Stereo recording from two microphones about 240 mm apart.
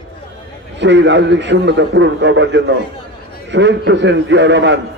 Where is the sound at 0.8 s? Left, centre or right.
Right.